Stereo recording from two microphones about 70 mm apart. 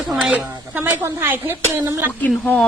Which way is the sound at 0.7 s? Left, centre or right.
Right.